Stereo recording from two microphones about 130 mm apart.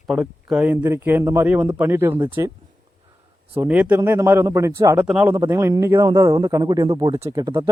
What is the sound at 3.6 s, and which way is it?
Speech, 10° right (ahead or behind).